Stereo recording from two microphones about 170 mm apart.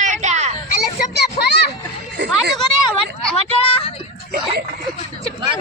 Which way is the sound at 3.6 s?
35° left (ahead or behind).